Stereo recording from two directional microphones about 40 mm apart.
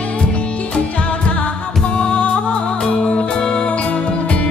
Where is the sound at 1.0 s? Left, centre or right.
Left.